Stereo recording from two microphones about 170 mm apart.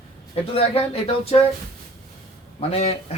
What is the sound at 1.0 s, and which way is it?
Speech, 35° left (ahead or behind).